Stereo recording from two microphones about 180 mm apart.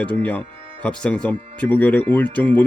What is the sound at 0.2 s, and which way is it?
Speech, 10° left (ahead or behind).